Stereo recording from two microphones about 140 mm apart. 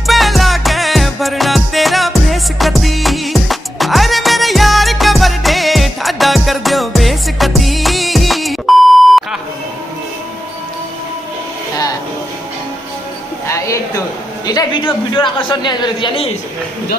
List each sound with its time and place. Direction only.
0.0 s music: centre (ahead or behind)
13.5 s a sound: 25° left (ahead or behind)
15.1 s a man's voice: 35° left (ahead or behind)